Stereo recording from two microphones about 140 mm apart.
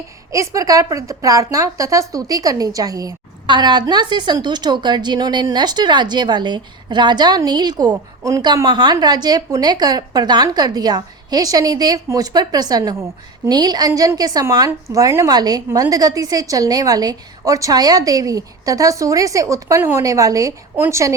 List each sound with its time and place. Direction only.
0.3 s a woman's voice: 25° right (ahead or behind)